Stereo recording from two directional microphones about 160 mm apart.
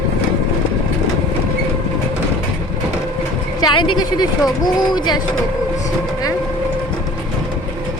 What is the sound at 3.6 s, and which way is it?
A woman's voice, 25° left (ahead or behind).